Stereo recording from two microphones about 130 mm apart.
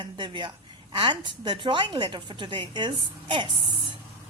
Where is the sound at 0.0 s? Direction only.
35° right (ahead or behind).